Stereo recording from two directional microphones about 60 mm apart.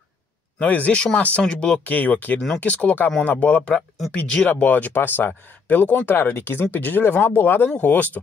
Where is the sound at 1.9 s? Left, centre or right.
Left.